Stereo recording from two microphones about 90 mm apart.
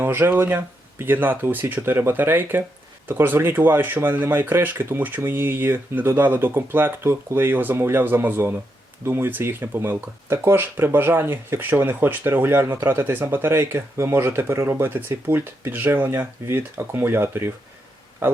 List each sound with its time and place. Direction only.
0.0 s speech: 25° right (ahead or behind)